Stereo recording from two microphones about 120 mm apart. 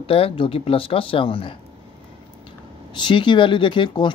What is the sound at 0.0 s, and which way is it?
Speech, 50° left (ahead or behind).